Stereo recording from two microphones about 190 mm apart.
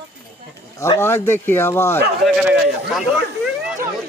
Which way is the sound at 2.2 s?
5° right (ahead or behind).